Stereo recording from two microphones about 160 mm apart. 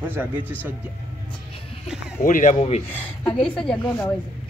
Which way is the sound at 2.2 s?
50° left (ahead or behind).